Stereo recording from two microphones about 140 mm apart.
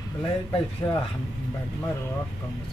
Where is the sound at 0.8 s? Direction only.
25° left (ahead or behind).